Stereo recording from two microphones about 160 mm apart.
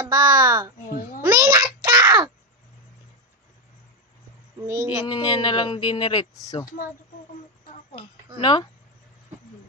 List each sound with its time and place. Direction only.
0.0 s a child's voice: 20° right (ahead or behind)
1.2 s a sound: 20° right (ahead or behind)
4.6 s child singing: 15° right (ahead or behind)
5.0 s speech: 30° left (ahead or behind)
8.4 s speech: 30° left (ahead or behind)